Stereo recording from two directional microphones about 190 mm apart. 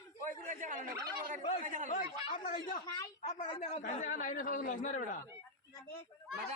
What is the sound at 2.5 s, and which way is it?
Speech, 50° left (ahead or behind).